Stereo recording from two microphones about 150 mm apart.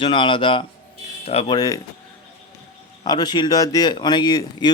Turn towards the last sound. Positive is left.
turn(degrees=30)  # may be behind; listen again after turning